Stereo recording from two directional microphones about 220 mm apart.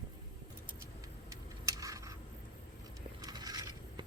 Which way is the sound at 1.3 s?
15° right (ahead or behind).